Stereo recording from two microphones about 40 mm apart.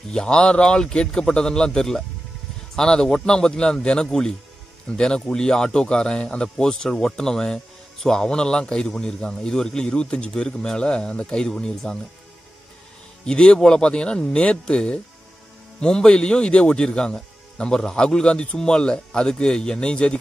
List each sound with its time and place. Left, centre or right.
0.1 s speech: left
13.2 s speech: left
15.8 s speech: left